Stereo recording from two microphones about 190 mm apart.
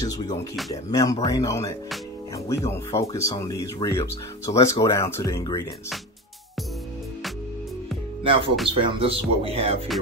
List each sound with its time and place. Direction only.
0.0 s speech: 20° left (ahead or behind)
2.9 s speech: 30° left (ahead or behind)
3.2 s speech: 15° left (ahead or behind)
8.6 s speech: 30° right (ahead or behind)